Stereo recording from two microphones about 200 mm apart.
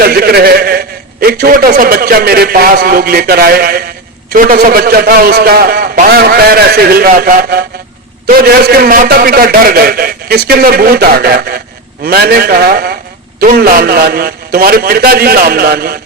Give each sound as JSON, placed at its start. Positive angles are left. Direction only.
{"t": 0.0, "sound": "a man's voice", "side_deg": -50}